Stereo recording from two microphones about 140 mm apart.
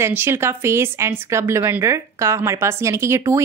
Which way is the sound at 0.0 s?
15° right (ahead or behind).